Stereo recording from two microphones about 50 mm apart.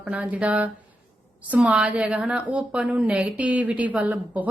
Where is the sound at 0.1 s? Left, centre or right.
Right.